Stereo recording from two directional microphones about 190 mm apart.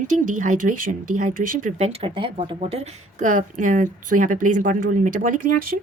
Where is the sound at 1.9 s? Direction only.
30° right (ahead or behind); by 5.8 s 45° right (ahead or behind).